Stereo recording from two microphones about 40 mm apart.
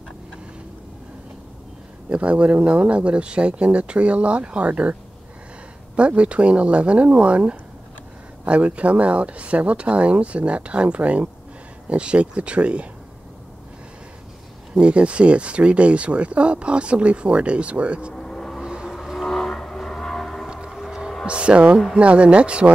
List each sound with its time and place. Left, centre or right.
2.0 s speech: right
5.9 s speech: right
14.8 s speech: right
18.1 s vehicle: centre
19.1 s train: centre
21.3 s speech: right